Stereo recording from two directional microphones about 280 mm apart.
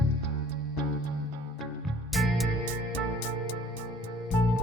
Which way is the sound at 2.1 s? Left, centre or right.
Centre.